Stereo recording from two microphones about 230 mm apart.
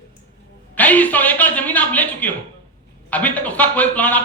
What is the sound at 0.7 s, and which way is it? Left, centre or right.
Speech, centre.